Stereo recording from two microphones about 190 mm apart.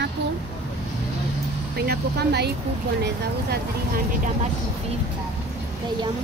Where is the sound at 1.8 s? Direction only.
60° right (ahead or behind).